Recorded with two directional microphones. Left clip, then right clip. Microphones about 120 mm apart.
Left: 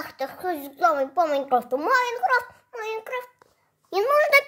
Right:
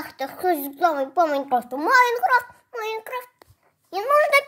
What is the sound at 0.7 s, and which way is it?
Speech, 10° right (ahead or behind).